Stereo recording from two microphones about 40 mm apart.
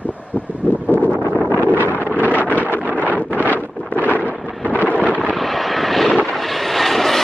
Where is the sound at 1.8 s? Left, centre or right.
Left.